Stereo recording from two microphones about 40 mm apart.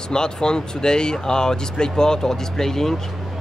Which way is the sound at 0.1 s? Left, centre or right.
Centre.